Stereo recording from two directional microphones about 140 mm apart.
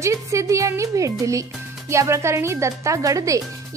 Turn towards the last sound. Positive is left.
turn(degrees=-25)  # may be behind; listen again after turning